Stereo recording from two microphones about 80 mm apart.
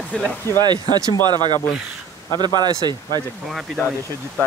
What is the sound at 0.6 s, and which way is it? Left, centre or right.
Speech, right.